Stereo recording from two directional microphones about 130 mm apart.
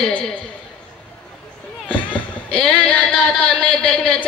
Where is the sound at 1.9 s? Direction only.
10° left (ahead or behind).